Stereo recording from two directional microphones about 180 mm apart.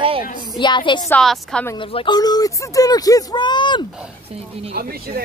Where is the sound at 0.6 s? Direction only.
25° left (ahead or behind).